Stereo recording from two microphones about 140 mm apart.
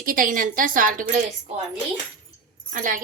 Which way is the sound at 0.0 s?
80° right.